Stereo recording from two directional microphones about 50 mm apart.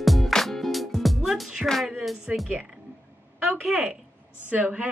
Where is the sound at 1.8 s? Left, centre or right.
Centre.